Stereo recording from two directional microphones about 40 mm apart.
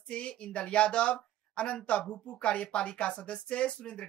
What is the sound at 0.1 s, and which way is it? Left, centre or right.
A woman's voice, left.